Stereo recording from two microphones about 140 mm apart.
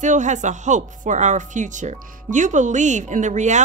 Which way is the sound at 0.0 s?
60° right (ahead or behind).